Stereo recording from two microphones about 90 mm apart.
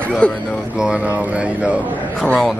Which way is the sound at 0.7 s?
10° right (ahead or behind).